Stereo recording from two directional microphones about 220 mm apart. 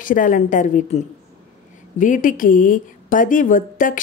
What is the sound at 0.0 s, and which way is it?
Speech, 35° left (ahead or behind).